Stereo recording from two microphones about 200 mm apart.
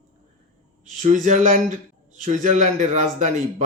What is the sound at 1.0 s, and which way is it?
Speech, 40° right (ahead or behind).